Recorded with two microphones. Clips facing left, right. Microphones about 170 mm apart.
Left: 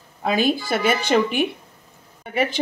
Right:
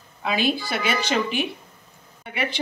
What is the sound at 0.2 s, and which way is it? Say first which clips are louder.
Speech: left 3 dB; 45° left (ahead or behind).